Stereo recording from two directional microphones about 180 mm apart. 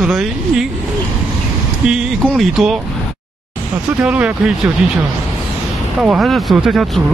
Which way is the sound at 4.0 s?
5° right (ahead or behind).